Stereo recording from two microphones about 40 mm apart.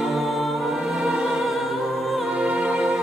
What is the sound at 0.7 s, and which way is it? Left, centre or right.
Music, centre.